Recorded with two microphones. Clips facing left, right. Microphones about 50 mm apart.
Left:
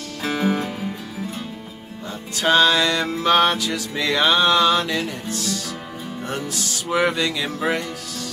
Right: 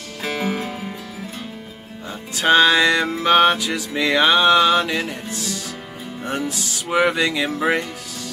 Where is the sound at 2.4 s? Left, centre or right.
Centre.